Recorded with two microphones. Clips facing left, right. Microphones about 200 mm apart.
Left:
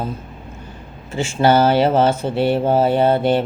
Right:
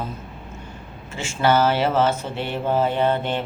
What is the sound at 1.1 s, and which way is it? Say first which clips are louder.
Speech: left 5 dB; 35° left (ahead or behind).